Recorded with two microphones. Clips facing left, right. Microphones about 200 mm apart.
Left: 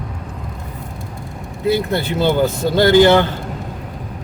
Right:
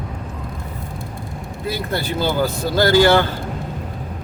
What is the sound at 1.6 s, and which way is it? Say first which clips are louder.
A man's voice: left 6 dB; 20° left (ahead or behind).